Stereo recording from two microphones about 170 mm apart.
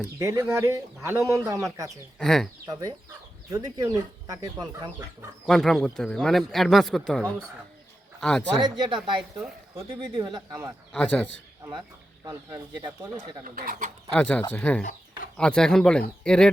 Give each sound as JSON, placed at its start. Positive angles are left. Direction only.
{"t": 0.0, "sound": "speech", "side_deg": -15}
{"t": 2.1, "sound": "speech", "side_deg": 0}
{"t": 3.5, "sound": "speech", "side_deg": -20}
{"t": 5.5, "sound": "speech", "side_deg": 0}
{"t": 8.5, "sound": "speech", "side_deg": -25}
{"t": 10.9, "sound": "a man's voice", "side_deg": 5}
{"t": 12.2, "sound": "speech", "side_deg": -20}
{"t": 13.4, "sound": "speech", "side_deg": -55}
{"t": 14.2, "sound": "a man's voice", "side_deg": 5}